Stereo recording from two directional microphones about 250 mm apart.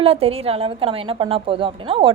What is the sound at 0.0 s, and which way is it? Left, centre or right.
A woman's voice, right.